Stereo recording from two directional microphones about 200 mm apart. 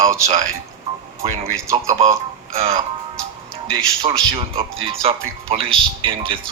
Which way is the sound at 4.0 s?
25° right (ahead or behind).